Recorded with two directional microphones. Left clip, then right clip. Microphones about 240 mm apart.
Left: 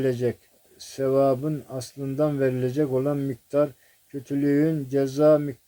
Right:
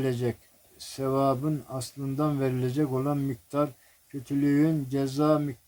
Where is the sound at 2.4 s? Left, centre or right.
Centre.